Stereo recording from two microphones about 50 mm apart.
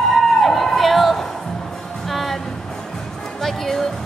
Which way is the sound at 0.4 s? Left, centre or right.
Centre.